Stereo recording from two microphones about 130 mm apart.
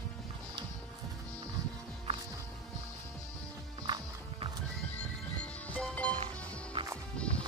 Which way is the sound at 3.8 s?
35° right (ahead or behind).